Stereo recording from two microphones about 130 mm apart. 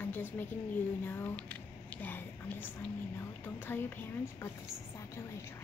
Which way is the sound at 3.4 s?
15° left (ahead or behind).